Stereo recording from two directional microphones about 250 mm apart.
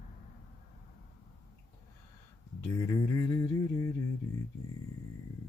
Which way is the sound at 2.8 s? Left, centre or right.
Centre.